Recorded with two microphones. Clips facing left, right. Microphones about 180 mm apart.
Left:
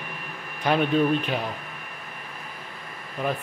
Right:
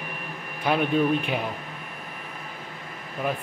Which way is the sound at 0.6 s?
10° right (ahead or behind).